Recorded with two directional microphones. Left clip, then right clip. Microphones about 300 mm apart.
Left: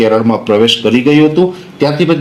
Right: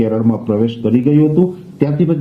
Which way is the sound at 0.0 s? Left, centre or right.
Centre.